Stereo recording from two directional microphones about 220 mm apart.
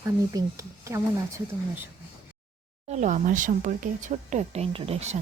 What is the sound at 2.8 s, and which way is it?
Speech, 35° right (ahead or behind).